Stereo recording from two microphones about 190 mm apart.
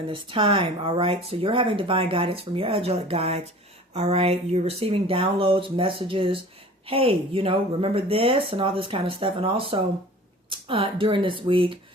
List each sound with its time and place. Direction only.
0.1 s speech: 25° right (ahead or behind)